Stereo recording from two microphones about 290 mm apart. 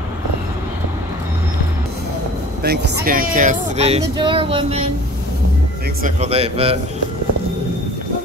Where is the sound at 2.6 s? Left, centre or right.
Right; by 4.8 s centre.